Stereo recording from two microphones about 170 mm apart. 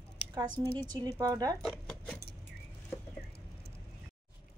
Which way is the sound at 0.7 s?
25° right (ahead or behind).